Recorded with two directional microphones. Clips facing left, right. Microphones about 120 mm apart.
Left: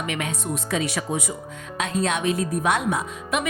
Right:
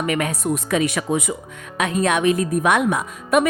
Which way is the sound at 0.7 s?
65° right (ahead or behind).